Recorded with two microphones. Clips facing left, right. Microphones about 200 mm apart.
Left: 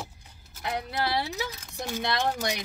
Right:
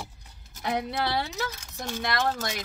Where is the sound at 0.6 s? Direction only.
5° left (ahead or behind).